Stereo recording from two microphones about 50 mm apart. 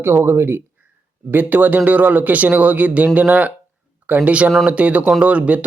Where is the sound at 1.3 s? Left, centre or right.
Right.